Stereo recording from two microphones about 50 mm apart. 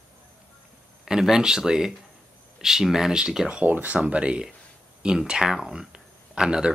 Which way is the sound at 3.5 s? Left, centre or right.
Right.